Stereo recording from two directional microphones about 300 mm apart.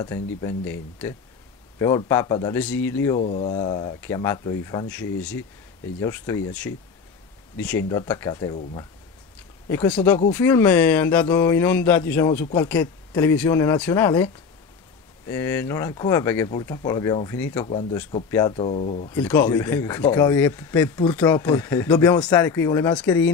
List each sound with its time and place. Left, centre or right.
0.4 s speech: centre
3.2 s speech: left
9.7 s speech: centre
19.1 s speech: centre